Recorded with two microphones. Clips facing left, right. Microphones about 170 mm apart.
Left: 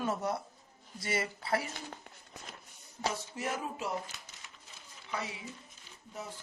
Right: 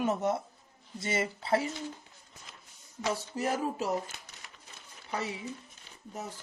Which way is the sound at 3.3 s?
40° right (ahead or behind).